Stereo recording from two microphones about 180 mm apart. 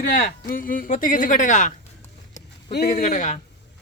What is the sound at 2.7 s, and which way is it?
Speech, 60° left (ahead or behind).